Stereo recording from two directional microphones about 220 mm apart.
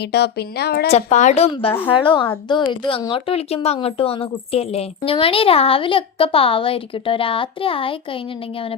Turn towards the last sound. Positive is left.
turn(degrees=25)  # may be behind; listen again after turning